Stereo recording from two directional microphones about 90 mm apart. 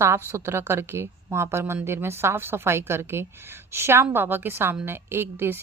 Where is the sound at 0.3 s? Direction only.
30° right (ahead or behind).